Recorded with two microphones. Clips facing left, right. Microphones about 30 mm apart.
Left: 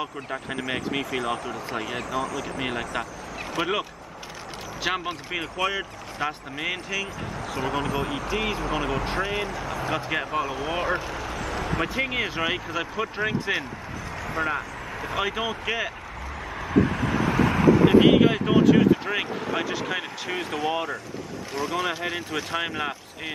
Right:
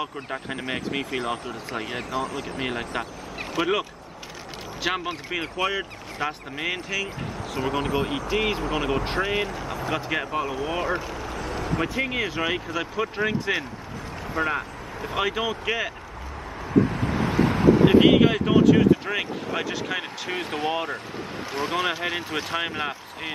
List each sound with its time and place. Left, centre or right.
0.0 s speech: centre
2.0 s speech: right
2.8 s speech: centre
3.5 s speech: centre
4.8 s speech: centre
7.6 s speech: right
9.8 s speech: centre
11.3 s a sound: left
11.6 s speech: centre
16.7 s vehicle: left
17.5 s vehicle: left
17.8 s speech: centre